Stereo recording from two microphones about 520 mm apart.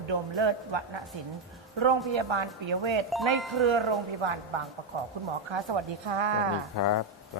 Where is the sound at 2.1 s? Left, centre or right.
Right.